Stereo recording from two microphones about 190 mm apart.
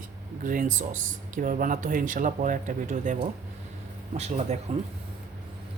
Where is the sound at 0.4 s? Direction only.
45° right (ahead or behind).